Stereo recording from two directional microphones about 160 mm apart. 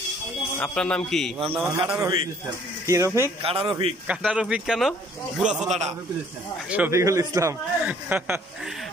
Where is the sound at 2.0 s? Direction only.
25° right (ahead or behind).